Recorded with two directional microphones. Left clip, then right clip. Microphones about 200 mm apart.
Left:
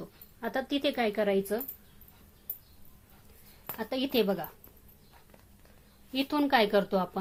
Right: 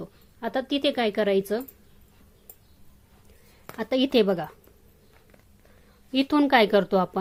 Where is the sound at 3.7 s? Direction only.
50° right (ahead or behind).